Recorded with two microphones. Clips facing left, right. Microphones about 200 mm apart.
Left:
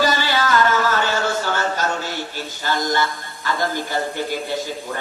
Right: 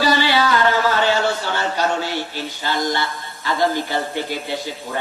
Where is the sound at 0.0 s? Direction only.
45° left (ahead or behind).